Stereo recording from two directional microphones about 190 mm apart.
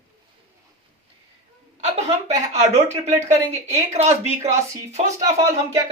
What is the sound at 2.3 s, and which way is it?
Speech, 35° right (ahead or behind).